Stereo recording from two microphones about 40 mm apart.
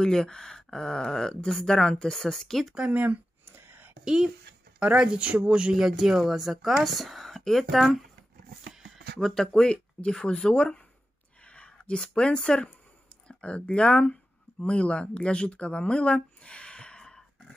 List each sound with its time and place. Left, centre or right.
0.0 s speech: centre
2.9 s speech: right
3.4 s a sound: right
4.0 s speech: right
5.8 s speech: centre
9.2 s speech: centre
11.4 s a sound: left
12.0 s speech: left